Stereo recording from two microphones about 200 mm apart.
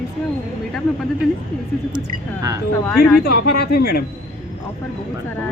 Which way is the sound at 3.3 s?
55° left (ahead or behind).